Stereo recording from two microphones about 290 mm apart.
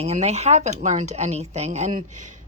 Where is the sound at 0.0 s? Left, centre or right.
Right.